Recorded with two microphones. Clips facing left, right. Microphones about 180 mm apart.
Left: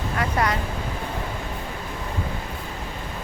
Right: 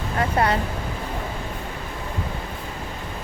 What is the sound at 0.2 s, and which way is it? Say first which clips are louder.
Speech: right 3 dB; 30° right (ahead or behind).